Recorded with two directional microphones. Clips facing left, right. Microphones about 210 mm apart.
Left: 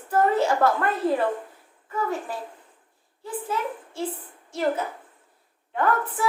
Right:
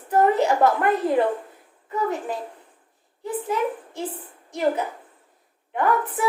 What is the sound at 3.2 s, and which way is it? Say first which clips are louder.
A child's voice: right 4 dB; 15° right (ahead or behind).